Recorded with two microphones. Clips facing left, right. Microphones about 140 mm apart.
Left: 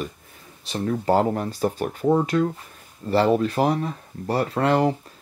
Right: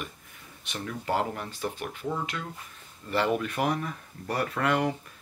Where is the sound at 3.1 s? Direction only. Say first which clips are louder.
Left 8 dB; 30° left (ahead or behind).